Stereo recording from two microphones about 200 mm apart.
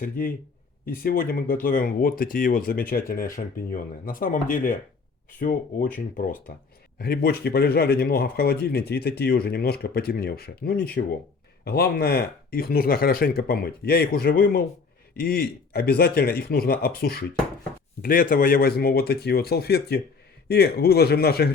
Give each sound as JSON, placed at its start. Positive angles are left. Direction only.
{"t": 0.0, "sound": "speech", "side_deg": 45}
{"t": 7.0, "sound": "speech", "side_deg": 50}